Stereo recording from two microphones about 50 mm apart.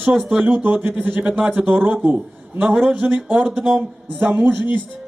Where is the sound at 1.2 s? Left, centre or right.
Right.